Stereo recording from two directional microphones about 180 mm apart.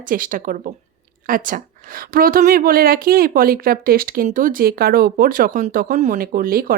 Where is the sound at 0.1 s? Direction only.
50° right (ahead or behind).